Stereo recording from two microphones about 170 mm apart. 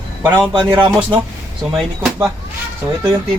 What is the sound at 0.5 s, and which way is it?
Speech, 30° right (ahead or behind).